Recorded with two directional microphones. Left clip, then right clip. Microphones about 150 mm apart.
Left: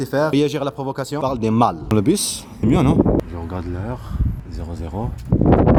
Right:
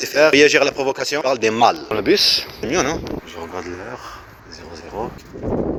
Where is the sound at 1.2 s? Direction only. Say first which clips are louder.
Right 2 dB; 45° right (ahead or behind).